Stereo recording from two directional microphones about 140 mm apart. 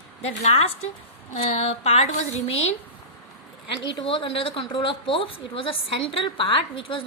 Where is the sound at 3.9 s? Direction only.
40° left (ahead or behind).